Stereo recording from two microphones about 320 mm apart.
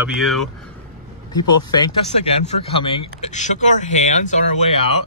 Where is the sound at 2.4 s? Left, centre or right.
Centre.